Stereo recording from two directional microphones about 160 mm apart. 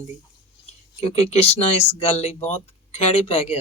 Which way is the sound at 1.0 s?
40° left (ahead or behind).